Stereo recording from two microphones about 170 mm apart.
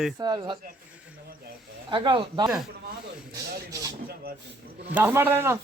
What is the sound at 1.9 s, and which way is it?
Speech, 30° right (ahead or behind).